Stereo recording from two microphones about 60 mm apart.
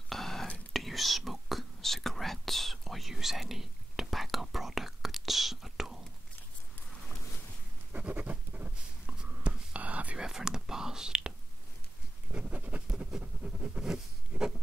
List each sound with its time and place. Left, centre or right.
0.1 s whispering: centre
7.9 s writing: right
9.1 s whispering: centre
10.2 s whispering: centre
12.3 s a sound: right
12.9 s writing: centre
13.2 s a sound: centre